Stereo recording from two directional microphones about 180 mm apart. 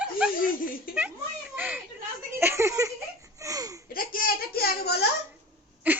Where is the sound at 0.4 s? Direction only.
50° left (ahead or behind).